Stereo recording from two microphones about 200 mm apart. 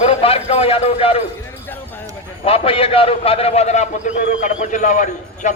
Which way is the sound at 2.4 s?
30° left (ahead or behind).